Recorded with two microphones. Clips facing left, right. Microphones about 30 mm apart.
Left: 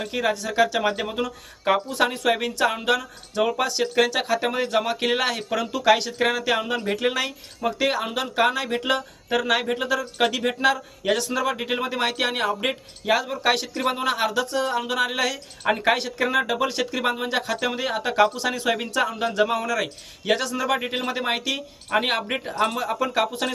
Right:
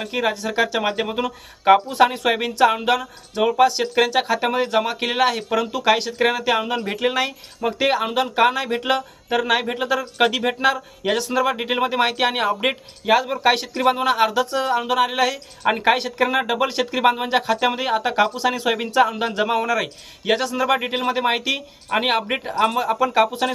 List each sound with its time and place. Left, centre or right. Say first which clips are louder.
0.0 s speech: right 2 dB; centre